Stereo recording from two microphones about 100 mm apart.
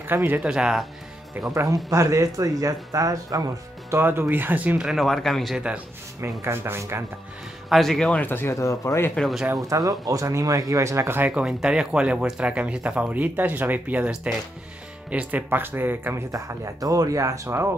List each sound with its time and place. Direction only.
0.0 s speech: 20° right (ahead or behind)
0.4 s speech: 5° right (ahead or behind)
1.5 s speech: 35° right (ahead or behind)
4.0 s speech: 20° right (ahead or behind); by 5.6 s 5° left (ahead or behind)
6.4 s speech: 25° right (ahead or behind)
7.7 s speech: centre (ahead or behind)
8.2 s speech: 20° left (ahead or behind)
9.1 s speech: centre (ahead or behind)
9.6 s speech: 40° right (ahead or behind)
11.1 s speech: 10° right (ahead or behind)
16.3 s speech: 35° right (ahead or behind)